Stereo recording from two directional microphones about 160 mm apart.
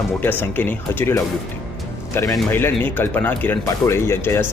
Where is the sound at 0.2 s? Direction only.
10° left (ahead or behind).